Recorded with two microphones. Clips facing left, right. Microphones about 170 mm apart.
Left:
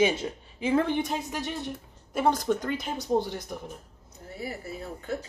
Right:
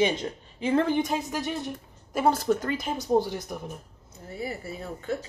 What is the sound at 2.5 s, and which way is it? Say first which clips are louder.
Speech: right 2 dB; 5° right (ahead or behind).